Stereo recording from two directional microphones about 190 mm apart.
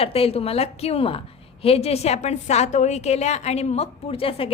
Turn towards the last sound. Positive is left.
turn(degrees=30)  # may be behind; listen again after turning